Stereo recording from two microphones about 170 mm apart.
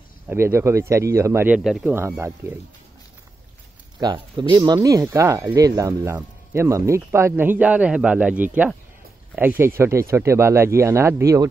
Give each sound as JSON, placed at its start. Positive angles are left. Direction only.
{"t": 0.3, "sound": "speech", "side_deg": -15}
{"t": 4.0, "sound": "speech", "side_deg": -25}